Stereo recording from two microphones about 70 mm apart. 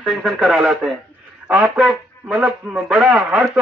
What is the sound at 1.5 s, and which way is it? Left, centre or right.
A man's voice, centre.